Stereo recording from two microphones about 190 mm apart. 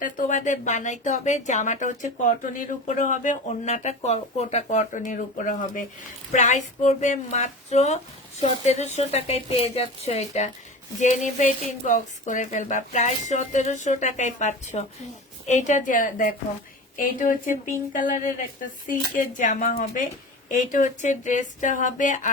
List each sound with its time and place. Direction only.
0.0 s speech: 40° left (ahead or behind)